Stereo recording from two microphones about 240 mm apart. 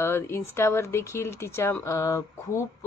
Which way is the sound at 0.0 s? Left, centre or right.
Centre.